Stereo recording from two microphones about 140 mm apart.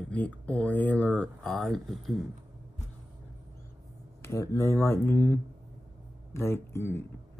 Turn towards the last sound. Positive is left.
turn(degrees=15)  # may be behind; listen again after turning